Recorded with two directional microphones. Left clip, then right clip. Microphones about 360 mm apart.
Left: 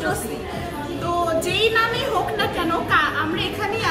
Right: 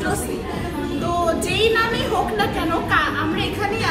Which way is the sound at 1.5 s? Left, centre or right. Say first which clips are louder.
Right 1 dB; centre.